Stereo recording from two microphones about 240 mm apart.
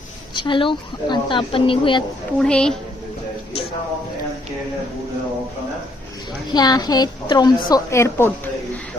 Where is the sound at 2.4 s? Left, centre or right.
Centre.